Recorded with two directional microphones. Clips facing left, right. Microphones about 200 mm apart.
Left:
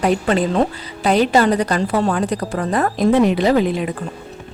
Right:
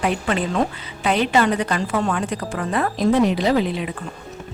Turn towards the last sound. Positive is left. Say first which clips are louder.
# left 4 dB
turn(degrees=45)  # may be behind; listen again after turning